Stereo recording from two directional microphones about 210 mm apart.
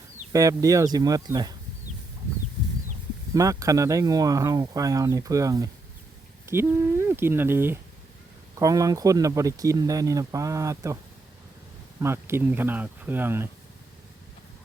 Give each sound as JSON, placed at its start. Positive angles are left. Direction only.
{"t": 0.3, "sound": "speech", "side_deg": -15}
{"t": 3.3, "sound": "speech", "side_deg": -15}
{"t": 11.9, "sound": "speech", "side_deg": -10}